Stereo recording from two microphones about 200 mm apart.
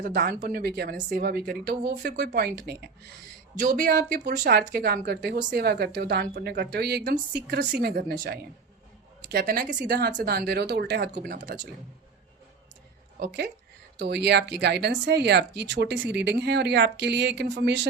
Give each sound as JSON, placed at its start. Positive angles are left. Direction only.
{"t": 0.0, "sound": "a woman's voice", "side_deg": -45}
{"t": 13.1, "sound": "speech", "side_deg": -55}